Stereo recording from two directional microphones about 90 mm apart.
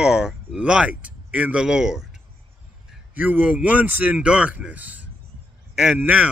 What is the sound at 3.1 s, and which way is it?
Speech, 20° right (ahead or behind).